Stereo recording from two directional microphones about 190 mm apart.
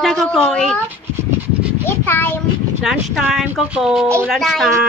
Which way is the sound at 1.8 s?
10° left (ahead or behind).